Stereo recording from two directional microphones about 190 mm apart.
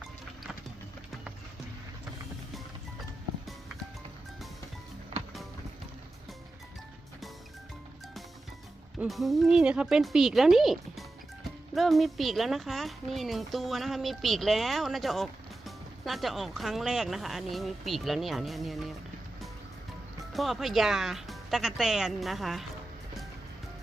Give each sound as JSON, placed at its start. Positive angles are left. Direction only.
{"t": 9.0, "sound": "speech", "side_deg": 0}
{"t": 20.3, "sound": "speech", "side_deg": 0}